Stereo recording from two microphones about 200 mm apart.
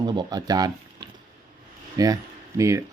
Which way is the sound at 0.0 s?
20° right (ahead or behind).